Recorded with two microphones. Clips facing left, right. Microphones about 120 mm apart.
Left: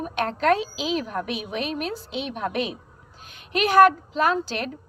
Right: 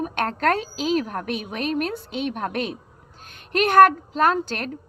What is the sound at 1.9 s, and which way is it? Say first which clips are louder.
A woman's voice: right 3 dB; 55° right (ahead or behind).